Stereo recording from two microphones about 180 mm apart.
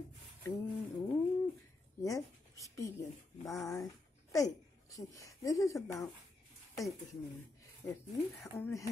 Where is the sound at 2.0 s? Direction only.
20° left (ahead or behind).